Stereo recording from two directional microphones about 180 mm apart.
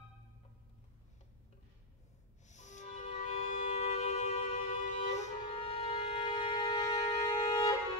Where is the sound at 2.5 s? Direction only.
40° left (ahead or behind).